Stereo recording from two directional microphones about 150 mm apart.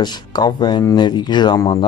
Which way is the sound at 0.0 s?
30° left (ahead or behind).